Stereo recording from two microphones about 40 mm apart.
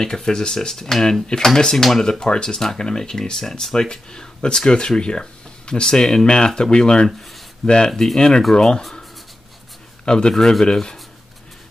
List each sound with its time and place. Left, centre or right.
0.0 s speech: centre
2.0 s speech: centre
7.9 s speech: centre
10.0 s speech: centre